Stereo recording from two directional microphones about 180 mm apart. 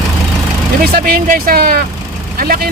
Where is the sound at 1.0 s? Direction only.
55° right (ahead or behind).